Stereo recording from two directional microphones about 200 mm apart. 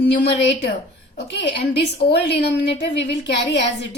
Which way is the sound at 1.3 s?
60° left (ahead or behind).